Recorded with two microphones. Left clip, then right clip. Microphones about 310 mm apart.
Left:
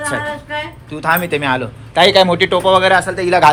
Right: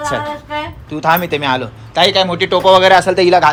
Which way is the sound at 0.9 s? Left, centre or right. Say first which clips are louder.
Right 2 dB; centre.